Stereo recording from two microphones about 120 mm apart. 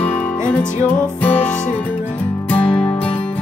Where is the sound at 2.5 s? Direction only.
45° left (ahead or behind).